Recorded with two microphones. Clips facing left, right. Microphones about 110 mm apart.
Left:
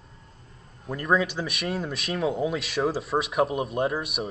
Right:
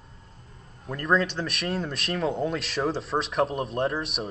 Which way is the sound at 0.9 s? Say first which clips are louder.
Even; 5° left (ahead or behind).